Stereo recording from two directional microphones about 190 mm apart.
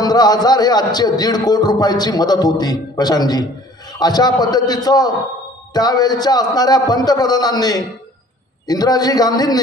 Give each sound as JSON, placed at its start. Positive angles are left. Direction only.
{"t": 0.0, "sound": "a man's voice", "side_deg": 20}